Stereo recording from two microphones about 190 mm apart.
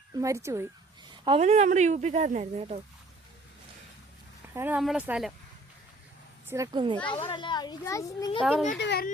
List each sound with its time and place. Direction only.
0.2 s speech: 15° right (ahead or behind)
1.2 s speech: 30° right (ahead or behind)
4.4 s speech: 10° right (ahead or behind)
6.5 s a child's voice: 20° right (ahead or behind)
7.1 s a child's voice: 25° left (ahead or behind)
8.4 s a child's voice: centre (ahead or behind)
8.8 s a woman's voice: 60° left (ahead or behind)